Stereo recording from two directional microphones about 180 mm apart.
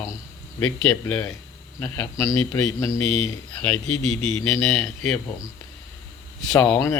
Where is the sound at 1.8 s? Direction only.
15° left (ahead or behind); by 5.5 s centre (ahead or behind).